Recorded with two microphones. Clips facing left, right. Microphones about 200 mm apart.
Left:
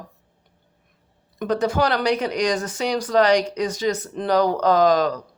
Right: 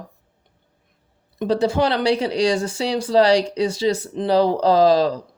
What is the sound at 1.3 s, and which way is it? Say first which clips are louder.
Speech: right 2 dB; 30° right (ahead or behind).